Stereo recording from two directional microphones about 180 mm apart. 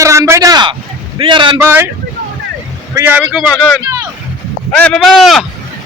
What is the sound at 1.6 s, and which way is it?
Speech, 10° right (ahead or behind).